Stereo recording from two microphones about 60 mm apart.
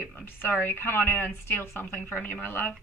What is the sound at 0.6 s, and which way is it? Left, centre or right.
A woman's voice, left.